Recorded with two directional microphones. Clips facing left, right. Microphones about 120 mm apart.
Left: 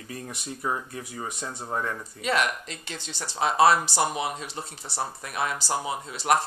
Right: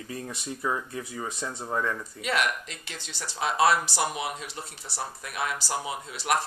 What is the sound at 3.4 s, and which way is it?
Speech, 40° left (ahead or behind).